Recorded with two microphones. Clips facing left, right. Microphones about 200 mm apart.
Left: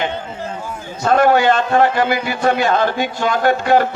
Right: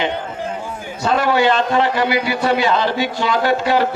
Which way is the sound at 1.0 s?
50° left (ahead or behind).